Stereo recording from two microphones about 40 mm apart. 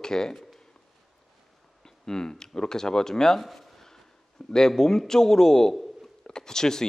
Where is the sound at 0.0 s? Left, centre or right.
Centre.